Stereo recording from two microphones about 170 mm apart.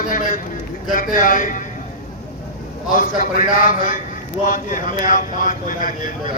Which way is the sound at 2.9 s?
50° left (ahead or behind).